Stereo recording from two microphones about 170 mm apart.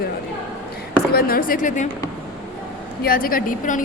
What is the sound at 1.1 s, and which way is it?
Speech, 55° left (ahead or behind).